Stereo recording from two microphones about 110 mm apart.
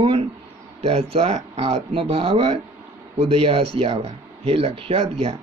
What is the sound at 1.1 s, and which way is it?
Speech, 80° right.